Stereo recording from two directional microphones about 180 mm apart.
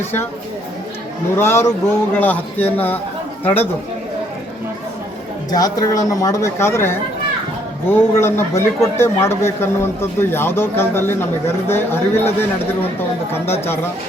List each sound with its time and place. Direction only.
1.4 s a man's voice: 15° left (ahead or behind)
5.5 s a man's voice: 20° left (ahead or behind)